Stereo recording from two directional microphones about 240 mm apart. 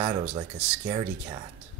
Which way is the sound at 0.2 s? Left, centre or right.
Right.